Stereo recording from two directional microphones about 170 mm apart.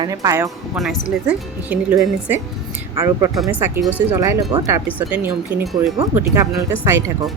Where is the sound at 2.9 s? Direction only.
20° right (ahead or behind).